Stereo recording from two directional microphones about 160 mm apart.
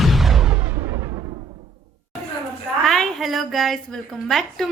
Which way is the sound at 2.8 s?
Centre (ahead or behind).